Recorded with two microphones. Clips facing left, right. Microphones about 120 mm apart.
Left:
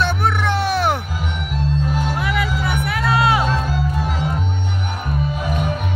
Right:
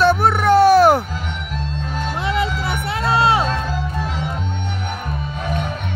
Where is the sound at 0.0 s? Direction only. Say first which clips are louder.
Right 5 dB; 40° right (ahead or behind).